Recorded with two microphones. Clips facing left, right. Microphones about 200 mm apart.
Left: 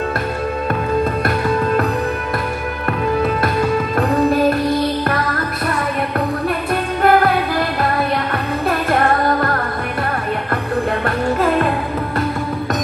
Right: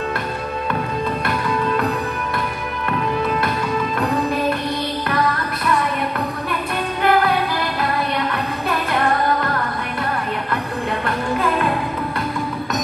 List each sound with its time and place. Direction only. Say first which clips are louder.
1.2 s music: left 4 dB; 45° left (ahead or behind)
7.0 s music: left 3 dB; 45° left (ahead or behind)
8.6 s music: left 4 dB; 50° left (ahead or behind)
11.1 s music: left 3 dB; 40° left (ahead or behind)